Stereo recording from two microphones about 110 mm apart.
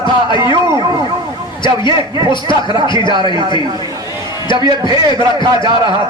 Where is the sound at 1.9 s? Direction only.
35° right (ahead or behind).